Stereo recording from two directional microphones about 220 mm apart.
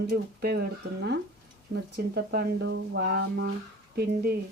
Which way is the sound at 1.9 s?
50° right (ahead or behind).